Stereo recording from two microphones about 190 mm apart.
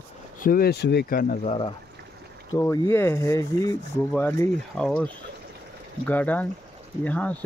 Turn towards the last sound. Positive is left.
turn(degrees=10)  # may be behind; listen again after turning